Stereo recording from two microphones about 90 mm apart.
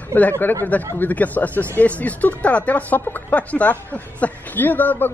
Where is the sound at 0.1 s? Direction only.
20° left (ahead or behind).